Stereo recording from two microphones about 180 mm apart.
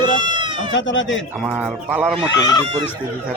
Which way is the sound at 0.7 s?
90° left.